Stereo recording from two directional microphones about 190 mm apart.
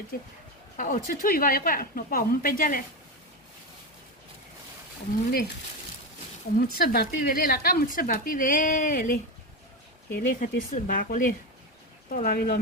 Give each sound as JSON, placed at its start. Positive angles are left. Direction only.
{"t": 0.1, "sound": "speech", "side_deg": 50}
{"t": 5.3, "sound": "speech", "side_deg": 55}
{"t": 6.6, "sound": "speech", "side_deg": 50}